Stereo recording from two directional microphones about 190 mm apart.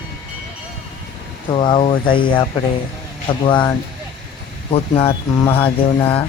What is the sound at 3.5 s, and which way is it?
Speech, 25° left (ahead or behind).